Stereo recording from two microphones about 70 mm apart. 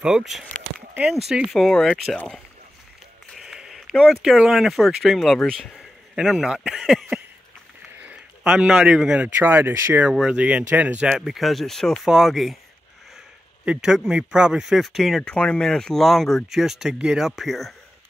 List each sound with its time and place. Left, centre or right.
0.0 s speech: centre
0.7 s a sound: centre
1.7 s speech: centre
3.3 s a sound: centre
4.1 s speech: centre
5.6 s a man's voice: centre
6.8 s speech: centre
8.5 s speech: centre
9.4 s speech: right
10.2 s speech: centre
11.1 s speech: centre
13.7 s speech: centre
15.2 s speech: centre